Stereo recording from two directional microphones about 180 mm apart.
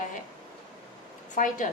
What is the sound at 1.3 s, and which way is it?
Speech, 45° left (ahead or behind).